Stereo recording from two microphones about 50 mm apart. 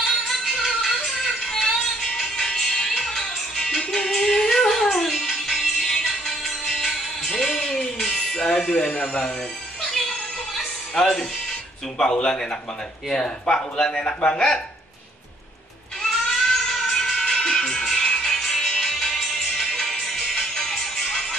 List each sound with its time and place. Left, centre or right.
0.6 s music: centre
2.3 s music: centre
8.8 s speech: left
10.0 s music: centre
11.0 s speech: centre
16.0 s music: centre